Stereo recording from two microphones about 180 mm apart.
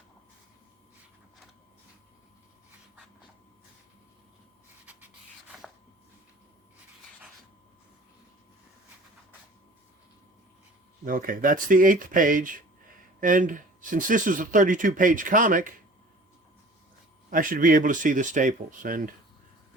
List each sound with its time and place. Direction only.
11.0 s speech: 50° right (ahead or behind)
17.2 s speech: 50° right (ahead or behind)